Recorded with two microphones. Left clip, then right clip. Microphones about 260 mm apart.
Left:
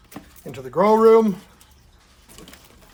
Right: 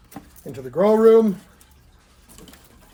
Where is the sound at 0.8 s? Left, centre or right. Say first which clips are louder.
Even; centre.